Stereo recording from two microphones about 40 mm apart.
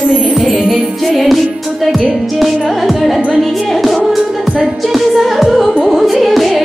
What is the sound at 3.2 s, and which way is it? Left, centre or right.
Music, right.